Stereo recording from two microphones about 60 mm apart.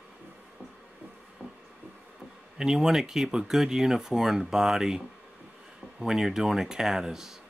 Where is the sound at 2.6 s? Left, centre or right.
Centre.